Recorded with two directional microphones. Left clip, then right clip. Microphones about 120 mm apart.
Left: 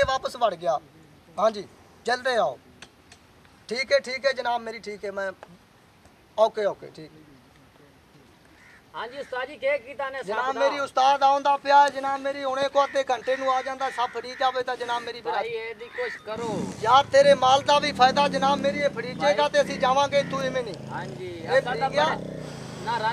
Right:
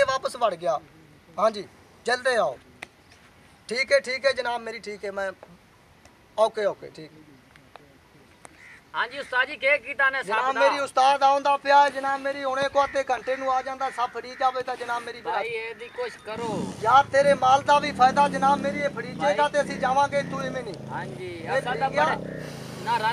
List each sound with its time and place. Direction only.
0.0 s a man's voice: centre (ahead or behind)
3.6 s a man's voice: 5° right (ahead or behind)
6.3 s a man's voice: 5° right (ahead or behind)
8.9 s speech: 30° right (ahead or behind)
10.4 s speech: 5° right (ahead or behind); by 15.2 s 15° left (ahead or behind)
15.2 s speech: 10° right (ahead or behind)
16.8 s speech: 15° left (ahead or behind)
21.2 s a man's voice: 5° right (ahead or behind)
22.4 s vehicle: centre (ahead or behind)